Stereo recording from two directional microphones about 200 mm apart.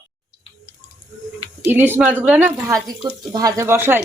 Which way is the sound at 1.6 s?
10° right (ahead or behind).